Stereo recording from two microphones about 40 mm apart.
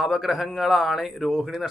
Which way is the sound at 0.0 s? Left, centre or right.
Centre.